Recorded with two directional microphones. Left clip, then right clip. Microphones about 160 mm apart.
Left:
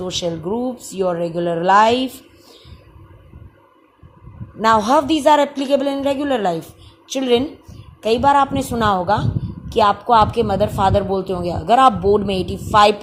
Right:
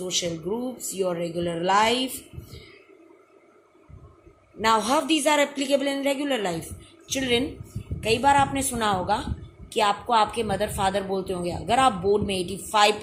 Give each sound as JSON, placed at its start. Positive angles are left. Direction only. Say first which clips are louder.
{"t": 0.0, "sound": "a woman's voice", "louder": "left 5 dB", "side_deg": 40}
{"t": 4.6, "sound": "a woman's voice", "louder": "left 7 dB", "side_deg": 45}